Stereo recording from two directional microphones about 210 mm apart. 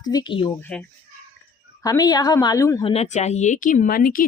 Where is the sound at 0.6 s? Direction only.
5° left (ahead or behind).